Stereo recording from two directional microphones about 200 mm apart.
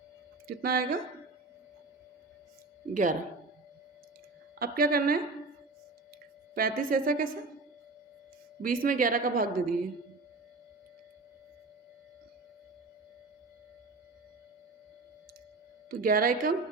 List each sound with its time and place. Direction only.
0.4 s a woman's voice: 50° right (ahead or behind)
2.9 s speech: 40° right (ahead or behind)
4.6 s a woman's voice: 50° right (ahead or behind)
6.5 s a woman's voice: 45° right (ahead or behind)
8.6 s a woman's voice: 45° right (ahead or behind)
15.9 s a woman's voice: 45° right (ahead or behind)